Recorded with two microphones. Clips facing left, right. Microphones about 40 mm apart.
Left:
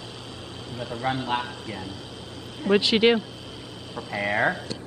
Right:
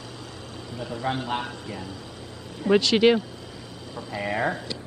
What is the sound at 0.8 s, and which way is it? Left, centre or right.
Speech, left.